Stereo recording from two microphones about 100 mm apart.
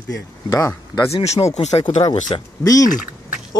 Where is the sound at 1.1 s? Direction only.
90° left.